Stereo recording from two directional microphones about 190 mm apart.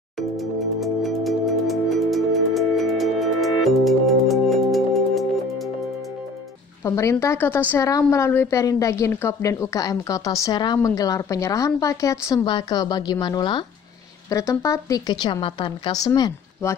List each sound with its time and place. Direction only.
0.4 s music: centre (ahead or behind)
6.8 s a woman's voice: 15° left (ahead or behind)